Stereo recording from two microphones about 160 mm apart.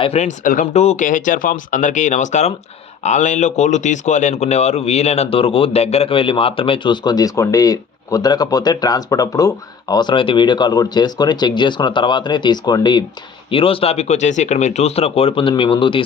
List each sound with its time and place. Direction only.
0.0 s speech: 45° left (ahead or behind)
0.6 s speech: 40° left (ahead or behind)